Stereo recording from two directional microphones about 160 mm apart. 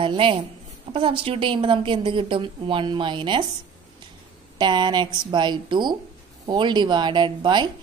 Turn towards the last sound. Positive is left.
turn(degrees=-30)  # may be behind; listen again after turning